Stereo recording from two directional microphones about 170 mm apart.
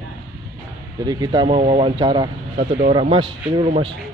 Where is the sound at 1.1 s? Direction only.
25° right (ahead or behind).